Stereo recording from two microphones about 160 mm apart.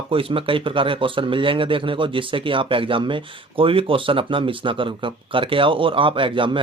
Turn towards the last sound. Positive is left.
turn(degrees=-30)  # may be behind; listen again after turning